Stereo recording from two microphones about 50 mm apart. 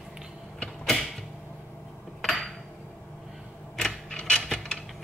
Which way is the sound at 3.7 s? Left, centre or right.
Centre.